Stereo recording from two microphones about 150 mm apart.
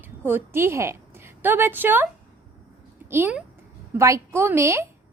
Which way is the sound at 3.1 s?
10° right (ahead or behind).